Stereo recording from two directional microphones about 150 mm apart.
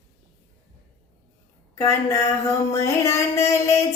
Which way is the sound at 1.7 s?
20° left (ahead or behind).